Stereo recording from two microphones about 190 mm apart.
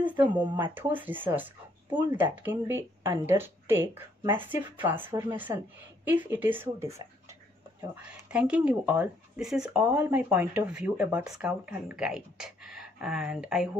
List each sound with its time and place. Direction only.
0.3 s speech: 10° right (ahead or behind)
1.9 s speech: 25° right (ahead or behind)
2.1 s speech: 10° right (ahead or behind)